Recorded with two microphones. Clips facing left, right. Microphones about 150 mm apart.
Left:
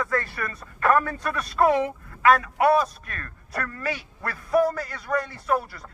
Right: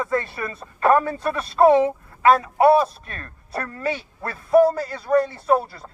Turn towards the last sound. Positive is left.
turn(degrees=-30)  # may be behind; listen again after turning